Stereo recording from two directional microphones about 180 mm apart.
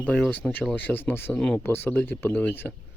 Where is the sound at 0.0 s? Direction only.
5° left (ahead or behind).